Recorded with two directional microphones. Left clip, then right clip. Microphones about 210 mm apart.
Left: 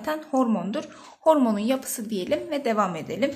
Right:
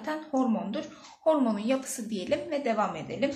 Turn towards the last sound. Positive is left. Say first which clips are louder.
# left 4 dB
turn(degrees=45)  # may be behind; listen again after turning